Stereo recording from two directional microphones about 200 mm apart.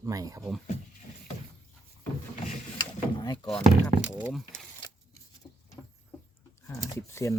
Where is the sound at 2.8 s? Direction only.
20° left (ahead or behind).